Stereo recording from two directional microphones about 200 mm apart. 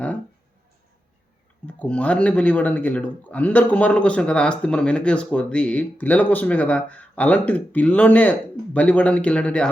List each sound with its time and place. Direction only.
1.6 s speech: 5° left (ahead or behind)